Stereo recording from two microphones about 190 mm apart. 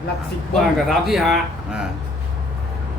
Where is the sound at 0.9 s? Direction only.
Centre (ahead or behind).